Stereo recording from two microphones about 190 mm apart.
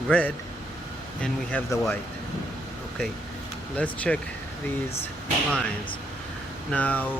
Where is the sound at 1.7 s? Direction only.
15° left (ahead or behind).